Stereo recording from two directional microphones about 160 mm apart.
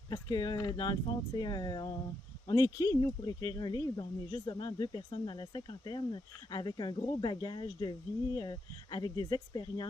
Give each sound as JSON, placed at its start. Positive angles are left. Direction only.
{"t": 0.1, "sound": "speech", "side_deg": 25}